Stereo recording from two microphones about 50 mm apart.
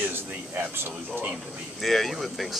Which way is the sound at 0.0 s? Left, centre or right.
Right.